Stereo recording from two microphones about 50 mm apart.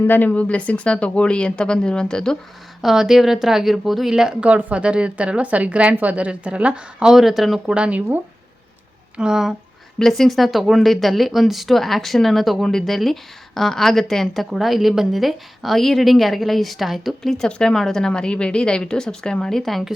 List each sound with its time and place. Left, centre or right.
0.1 s speech: left
0.3 s speech: left
2.8 s speech: centre
4.1 s speech: centre
4.4 s a woman's voice: right
7.0 s speech: centre
7.7 s a woman's voice: right
9.1 s speech: centre
10.0 s a woman's voice: centre